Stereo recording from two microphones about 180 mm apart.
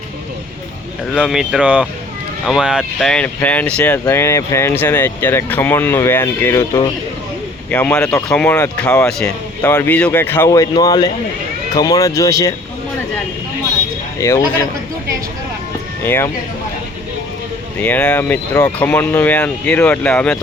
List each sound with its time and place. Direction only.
1.1 s speech: 5° right (ahead or behind); by 9.0 s 15° left (ahead or behind)
9.0 s a man's voice: 5° left (ahead or behind)
14.2 s speech: 15° left (ahead or behind)
16.0 s speech: 15° left (ahead or behind)
17.7 s speech: 10° left (ahead or behind)